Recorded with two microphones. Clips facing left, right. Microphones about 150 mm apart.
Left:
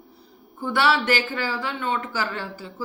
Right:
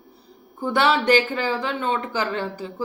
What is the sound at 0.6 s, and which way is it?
A woman's voice, 20° right (ahead or behind).